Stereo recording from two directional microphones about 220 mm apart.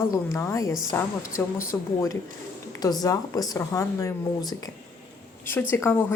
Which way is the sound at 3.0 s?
15° left (ahead or behind).